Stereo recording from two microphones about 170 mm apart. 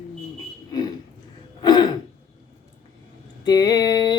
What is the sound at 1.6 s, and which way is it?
Throat clearing, 25° left (ahead or behind).